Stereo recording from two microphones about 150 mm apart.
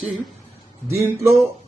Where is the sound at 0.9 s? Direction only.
20° right (ahead or behind).